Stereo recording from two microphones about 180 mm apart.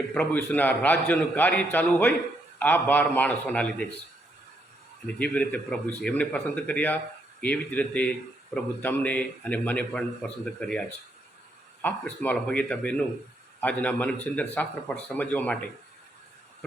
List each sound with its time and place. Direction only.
0.1 s a man's voice: 10° left (ahead or behind)
5.0 s a man's voice: 10° left (ahead or behind)